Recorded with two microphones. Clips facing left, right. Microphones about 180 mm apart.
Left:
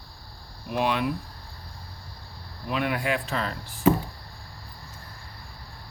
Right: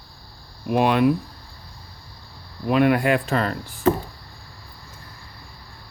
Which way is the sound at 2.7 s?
55° right (ahead or behind).